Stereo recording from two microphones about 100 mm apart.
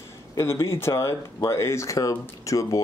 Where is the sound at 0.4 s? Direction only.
30° left (ahead or behind).